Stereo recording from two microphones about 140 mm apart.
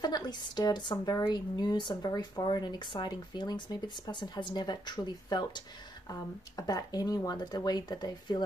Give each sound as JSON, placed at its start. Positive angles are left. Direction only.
{"t": 0.0, "sound": "a woman's voice", "side_deg": 30}